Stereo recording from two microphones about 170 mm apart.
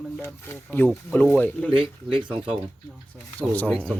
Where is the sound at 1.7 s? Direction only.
30° right (ahead or behind).